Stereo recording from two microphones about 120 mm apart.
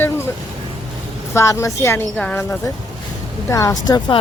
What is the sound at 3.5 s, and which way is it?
Speech, 30° left (ahead or behind).